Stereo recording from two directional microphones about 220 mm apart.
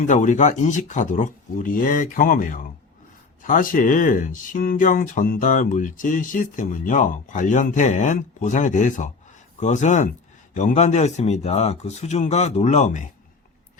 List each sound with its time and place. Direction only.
0.1 s speech: 35° left (ahead or behind)